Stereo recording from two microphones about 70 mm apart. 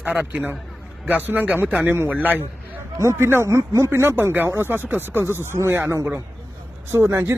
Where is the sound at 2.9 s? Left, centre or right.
Right.